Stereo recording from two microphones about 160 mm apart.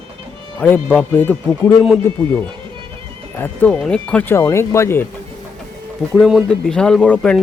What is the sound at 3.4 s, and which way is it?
Speech, 10° left (ahead or behind).